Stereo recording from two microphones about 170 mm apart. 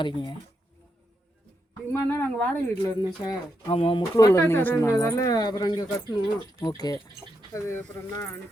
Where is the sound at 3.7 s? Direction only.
35° left (ahead or behind).